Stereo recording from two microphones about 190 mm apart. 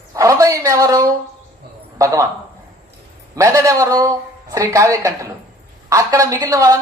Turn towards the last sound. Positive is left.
turn(degrees=-15)  # may be behind; listen again after turning